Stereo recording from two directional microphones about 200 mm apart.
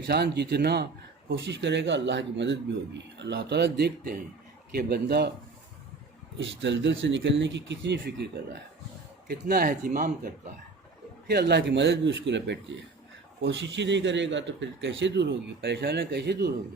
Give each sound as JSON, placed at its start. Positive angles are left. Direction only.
{"t": 0.1, "sound": "a man's voice", "side_deg": -55}
{"t": 6.4, "sound": "a man's voice", "side_deg": -65}
{"t": 9.2, "sound": "a man's voice", "side_deg": -50}